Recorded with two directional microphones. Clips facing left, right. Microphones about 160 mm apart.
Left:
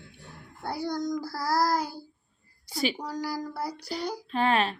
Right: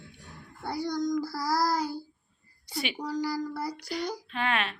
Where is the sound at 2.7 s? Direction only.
35° left (ahead or behind).